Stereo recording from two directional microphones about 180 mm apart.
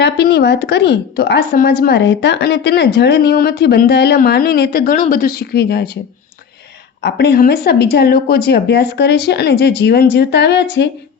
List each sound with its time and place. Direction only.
0.0 s a woman's voice: 65° left (ahead or behind)
7.0 s a woman's voice: 65° left (ahead or behind)